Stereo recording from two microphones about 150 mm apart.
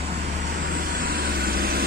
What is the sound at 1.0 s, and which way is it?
Vehicle, 90° right.